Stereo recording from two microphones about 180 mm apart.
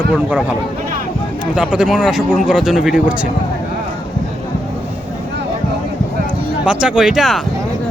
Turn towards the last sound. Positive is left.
turn(degrees=0)  # may be behind; listen again after turning